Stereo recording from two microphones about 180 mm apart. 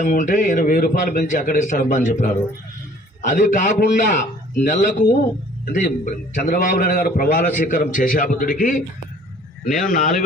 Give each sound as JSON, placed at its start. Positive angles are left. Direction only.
{"t": 0.0, "sound": "a man's voice", "side_deg": 45}